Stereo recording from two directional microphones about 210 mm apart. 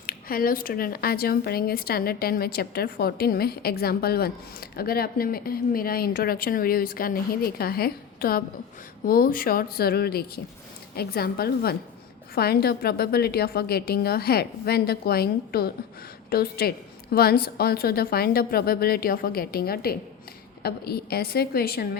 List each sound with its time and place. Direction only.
0.0 s speech: 45° left (ahead or behind)